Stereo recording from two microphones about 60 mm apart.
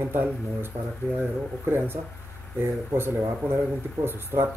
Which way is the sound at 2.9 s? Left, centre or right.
Right.